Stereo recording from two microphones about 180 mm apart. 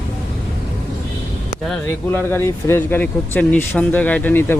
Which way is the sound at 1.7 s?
10° left (ahead or behind).